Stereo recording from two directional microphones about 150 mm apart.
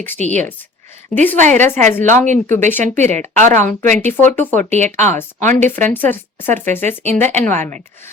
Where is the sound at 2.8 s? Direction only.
55° right (ahead or behind).